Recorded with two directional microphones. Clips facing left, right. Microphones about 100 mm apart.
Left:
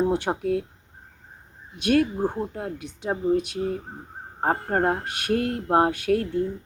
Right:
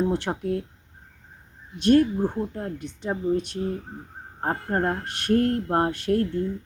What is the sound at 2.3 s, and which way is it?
Speech, 20° left (ahead or behind).